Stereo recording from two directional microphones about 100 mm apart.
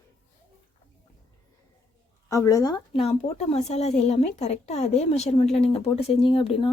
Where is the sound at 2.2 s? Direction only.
35° left (ahead or behind).